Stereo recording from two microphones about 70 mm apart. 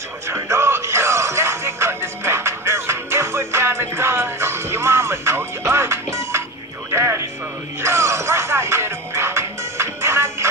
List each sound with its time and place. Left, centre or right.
0.3 s music: right